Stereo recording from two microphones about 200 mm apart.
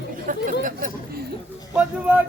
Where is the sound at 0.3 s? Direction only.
40° right (ahead or behind).